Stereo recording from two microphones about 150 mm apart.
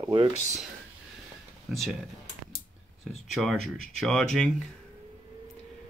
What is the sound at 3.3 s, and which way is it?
Speech, centre (ahead or behind).